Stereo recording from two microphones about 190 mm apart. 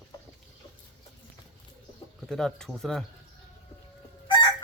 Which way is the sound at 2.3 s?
5° left (ahead or behind).